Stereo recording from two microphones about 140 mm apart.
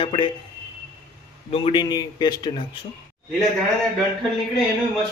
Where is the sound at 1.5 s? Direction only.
40° left (ahead or behind).